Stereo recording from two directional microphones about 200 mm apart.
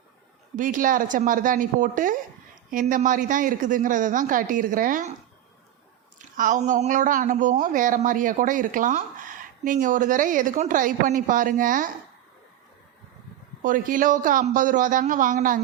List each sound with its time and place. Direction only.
0.5 s a woman's voice: 40° right (ahead or behind)
6.1 s a woman's voice: 40° right (ahead or behind)
13.6 s a woman's voice: 40° right (ahead or behind)